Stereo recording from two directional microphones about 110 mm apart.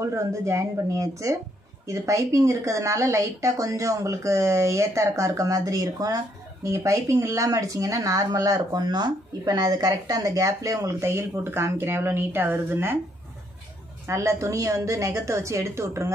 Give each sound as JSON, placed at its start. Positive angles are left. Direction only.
{"t": 0.0, "sound": "speech", "side_deg": -25}
{"t": 14.0, "sound": "speech", "side_deg": -25}